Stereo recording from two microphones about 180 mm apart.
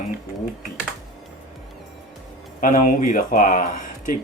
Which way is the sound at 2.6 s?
50° left (ahead or behind).